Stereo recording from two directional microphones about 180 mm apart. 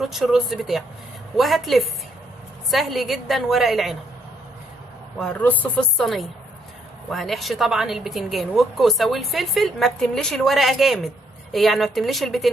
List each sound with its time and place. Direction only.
0.0 s a woman's voice: centre (ahead or behind)
5.2 s a woman's voice: 10° left (ahead or behind)